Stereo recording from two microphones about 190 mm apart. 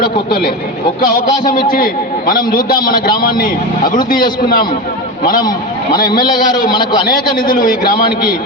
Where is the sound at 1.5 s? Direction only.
50° left (ahead or behind).